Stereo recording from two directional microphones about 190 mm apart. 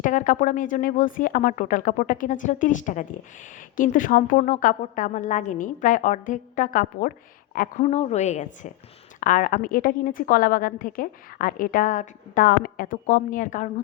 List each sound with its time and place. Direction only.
0.0 s a woman's voice: 40° left (ahead or behind)
7.9 s a woman's voice: 35° left (ahead or behind)